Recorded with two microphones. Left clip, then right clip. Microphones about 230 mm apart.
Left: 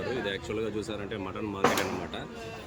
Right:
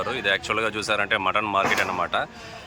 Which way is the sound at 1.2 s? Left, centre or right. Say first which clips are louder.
Right 14 dB; right.